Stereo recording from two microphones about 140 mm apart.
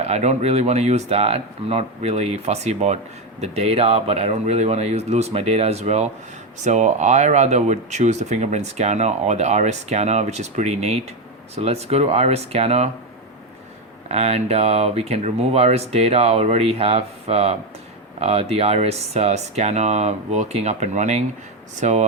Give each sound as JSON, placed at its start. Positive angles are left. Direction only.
{"t": 0.0, "sound": "speech", "side_deg": -55}
{"t": 14.1, "sound": "speech", "side_deg": -50}